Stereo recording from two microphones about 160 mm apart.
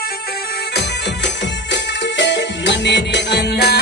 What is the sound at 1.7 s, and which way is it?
Music, 90° left.